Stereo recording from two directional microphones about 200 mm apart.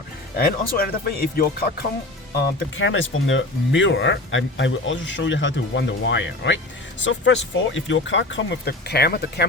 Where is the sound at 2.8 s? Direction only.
70° left (ahead or behind).